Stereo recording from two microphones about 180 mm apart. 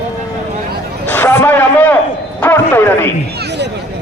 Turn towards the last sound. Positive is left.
turn(degrees=15)  # may be behind; listen again after turning